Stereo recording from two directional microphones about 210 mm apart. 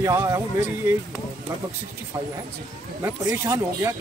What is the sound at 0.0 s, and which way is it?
Speech, 15° right (ahead or behind).